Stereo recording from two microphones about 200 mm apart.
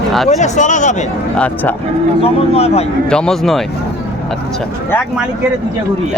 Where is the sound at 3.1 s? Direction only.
5° left (ahead or behind).